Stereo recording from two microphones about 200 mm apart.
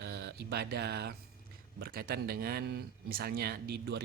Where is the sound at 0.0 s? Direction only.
60° right (ahead or behind).